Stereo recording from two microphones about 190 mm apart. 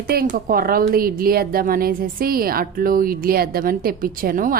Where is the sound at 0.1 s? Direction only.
50° right (ahead or behind).